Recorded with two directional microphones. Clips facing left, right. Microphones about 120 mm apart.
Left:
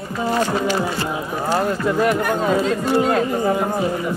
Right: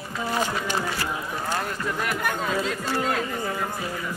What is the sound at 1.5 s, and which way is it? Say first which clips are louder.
Speech: left 11 dB; 35° left (ahead or behind).